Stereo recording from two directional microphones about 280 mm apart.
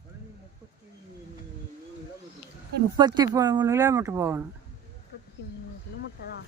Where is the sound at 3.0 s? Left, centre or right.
Centre.